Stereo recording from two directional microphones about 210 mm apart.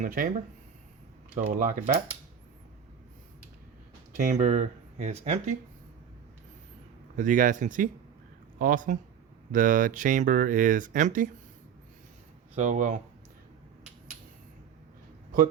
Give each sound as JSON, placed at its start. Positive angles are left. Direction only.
{"t": 0.0, "sound": "speech", "side_deg": -40}
{"t": 1.4, "sound": "speech", "side_deg": -35}
{"t": 4.1, "sound": "speech", "side_deg": -35}
{"t": 7.2, "sound": "speech", "side_deg": -40}
{"t": 12.5, "sound": "speech", "side_deg": -35}